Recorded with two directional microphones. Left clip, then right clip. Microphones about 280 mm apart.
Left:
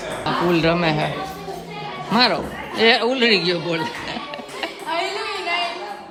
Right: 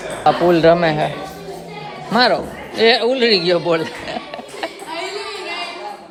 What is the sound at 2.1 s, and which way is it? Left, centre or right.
Speech, centre.